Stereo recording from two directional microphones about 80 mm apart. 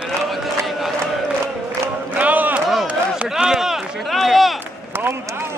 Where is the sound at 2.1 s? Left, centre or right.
Centre.